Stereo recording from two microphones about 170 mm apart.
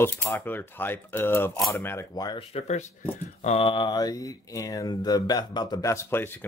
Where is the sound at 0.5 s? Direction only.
10° left (ahead or behind).